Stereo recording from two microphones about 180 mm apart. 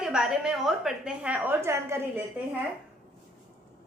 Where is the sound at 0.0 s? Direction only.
5° right (ahead or behind).